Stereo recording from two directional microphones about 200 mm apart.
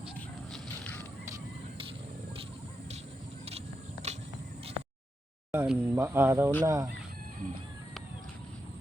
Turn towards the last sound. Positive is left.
turn(degrees=-15)  # may be behind; listen again after turning